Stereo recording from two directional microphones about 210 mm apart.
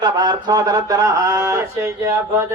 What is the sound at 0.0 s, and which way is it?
Speech, 20° right (ahead or behind).